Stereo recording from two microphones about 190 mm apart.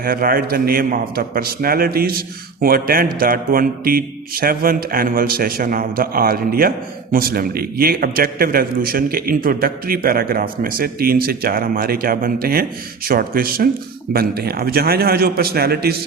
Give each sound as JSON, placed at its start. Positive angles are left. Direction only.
{"t": 0.0, "sound": "a man's voice", "side_deg": -50}